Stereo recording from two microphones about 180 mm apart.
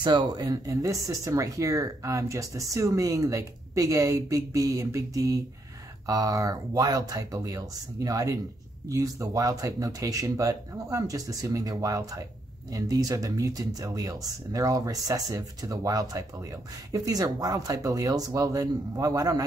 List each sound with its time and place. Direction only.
0.0 s speech: 25° right (ahead or behind)